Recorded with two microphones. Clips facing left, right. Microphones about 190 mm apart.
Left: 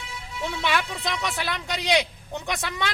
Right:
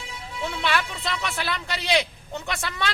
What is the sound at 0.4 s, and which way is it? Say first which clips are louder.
A man's voice: even; 15° left (ahead or behind).